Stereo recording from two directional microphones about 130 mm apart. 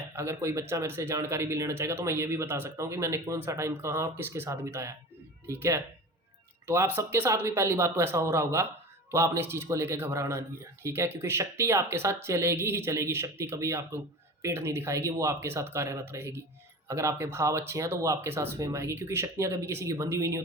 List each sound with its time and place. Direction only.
0.1 s speech: 20° right (ahead or behind)